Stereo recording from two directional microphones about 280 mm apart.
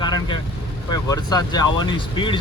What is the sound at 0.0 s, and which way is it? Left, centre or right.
Vehicle, centre.